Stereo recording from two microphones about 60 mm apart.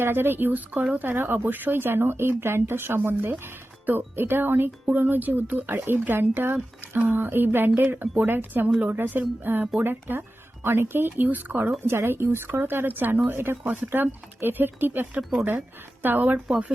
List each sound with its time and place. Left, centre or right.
0.0 s speech: right
11.9 s speech: right